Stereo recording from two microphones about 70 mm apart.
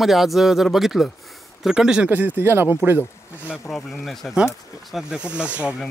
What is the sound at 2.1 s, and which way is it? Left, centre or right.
Speech, right.